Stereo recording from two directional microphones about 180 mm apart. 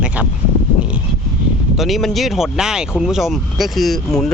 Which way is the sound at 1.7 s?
Centre (ahead or behind).